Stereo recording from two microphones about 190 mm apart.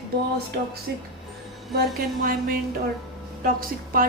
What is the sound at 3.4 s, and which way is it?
Speech, 50° right (ahead or behind).